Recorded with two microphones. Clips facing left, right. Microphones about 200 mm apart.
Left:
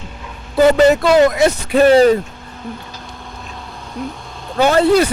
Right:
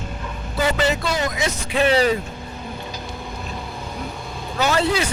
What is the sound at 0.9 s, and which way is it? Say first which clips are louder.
Speech: left 12 dB; 65° left (ahead or behind).